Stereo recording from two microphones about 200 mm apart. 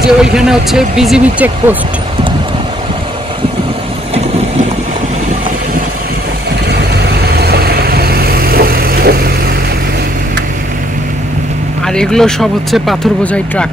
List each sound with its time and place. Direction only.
0.2 s speech: 5° right (ahead or behind)
6.7 s vehicle: 55° right (ahead or behind)
11.8 s speech: 5° left (ahead or behind)